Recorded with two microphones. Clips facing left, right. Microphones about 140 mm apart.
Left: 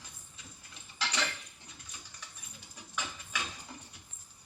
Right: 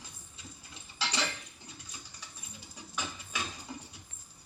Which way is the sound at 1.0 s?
30° right (ahead or behind).